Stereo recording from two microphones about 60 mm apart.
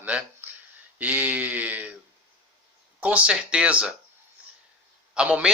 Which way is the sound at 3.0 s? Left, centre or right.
Right.